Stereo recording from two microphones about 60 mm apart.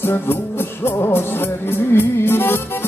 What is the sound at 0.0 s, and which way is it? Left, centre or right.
Music, left.